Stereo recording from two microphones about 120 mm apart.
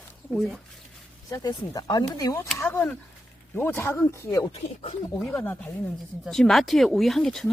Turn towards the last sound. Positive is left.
turn(degrees=5)  # may be behind; listen again after turning